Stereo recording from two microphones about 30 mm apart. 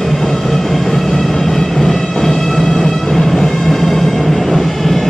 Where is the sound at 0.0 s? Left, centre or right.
Centre.